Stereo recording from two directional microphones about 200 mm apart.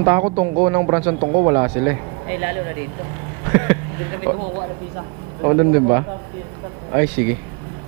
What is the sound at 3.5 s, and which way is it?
Speech, 15° right (ahead or behind).